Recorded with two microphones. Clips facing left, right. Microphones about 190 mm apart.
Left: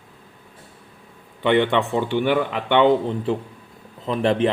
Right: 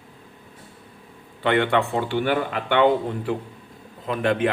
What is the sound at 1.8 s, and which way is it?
Speech, 20° left (ahead or behind).